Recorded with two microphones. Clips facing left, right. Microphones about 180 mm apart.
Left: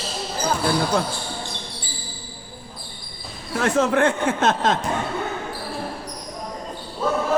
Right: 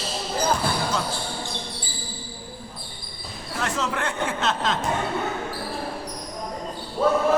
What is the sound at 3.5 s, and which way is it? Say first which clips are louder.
Speech: left 8 dB; 50° left (ahead or behind).